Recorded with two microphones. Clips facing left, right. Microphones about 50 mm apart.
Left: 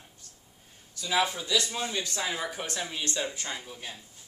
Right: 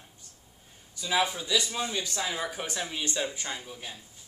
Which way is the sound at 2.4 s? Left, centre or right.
Centre.